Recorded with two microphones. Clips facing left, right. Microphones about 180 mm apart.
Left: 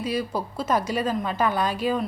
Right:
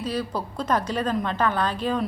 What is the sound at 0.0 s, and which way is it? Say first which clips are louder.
A woman's voice: left 1 dB; 10° left (ahead or behind).